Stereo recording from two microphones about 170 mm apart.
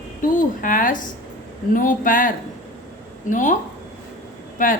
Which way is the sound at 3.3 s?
50° left (ahead or behind).